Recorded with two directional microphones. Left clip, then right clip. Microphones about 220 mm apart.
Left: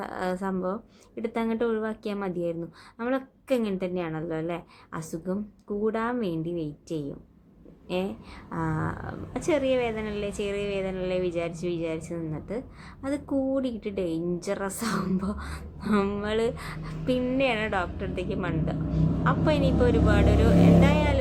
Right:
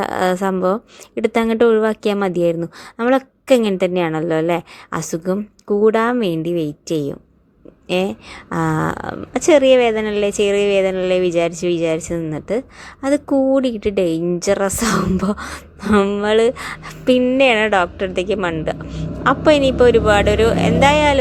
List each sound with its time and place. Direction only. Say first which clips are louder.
0.0 s a woman's voice: right 13 dB; 35° right (ahead or behind)